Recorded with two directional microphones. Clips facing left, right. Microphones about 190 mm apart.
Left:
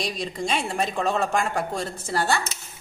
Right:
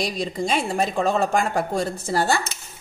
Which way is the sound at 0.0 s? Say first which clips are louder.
Right 3 dB; 35° right (ahead or behind).